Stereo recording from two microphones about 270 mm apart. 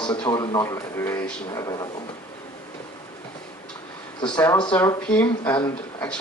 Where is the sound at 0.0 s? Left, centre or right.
Centre.